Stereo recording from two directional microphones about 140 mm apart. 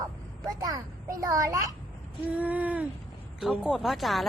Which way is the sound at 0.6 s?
25° right (ahead or behind).